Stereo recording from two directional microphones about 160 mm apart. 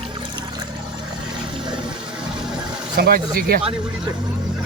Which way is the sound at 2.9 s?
70° right (ahead or behind).